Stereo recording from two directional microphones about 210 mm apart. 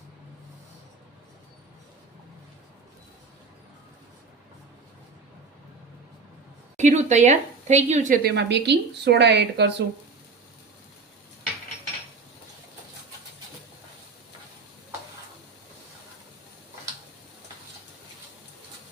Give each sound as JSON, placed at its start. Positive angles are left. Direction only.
{"t": 6.7, "sound": "speech", "side_deg": -35}
{"t": 8.4, "sound": "speech", "side_deg": -55}